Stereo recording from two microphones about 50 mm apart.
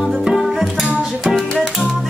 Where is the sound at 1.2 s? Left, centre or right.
Centre.